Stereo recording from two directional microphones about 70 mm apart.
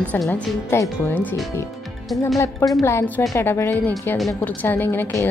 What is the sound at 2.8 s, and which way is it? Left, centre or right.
A woman's voice, left.